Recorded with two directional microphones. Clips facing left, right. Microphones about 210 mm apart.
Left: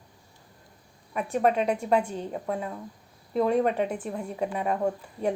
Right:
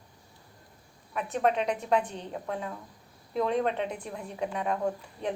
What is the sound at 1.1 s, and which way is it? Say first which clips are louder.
A woman's voice: left 3 dB; 5° left (ahead or behind).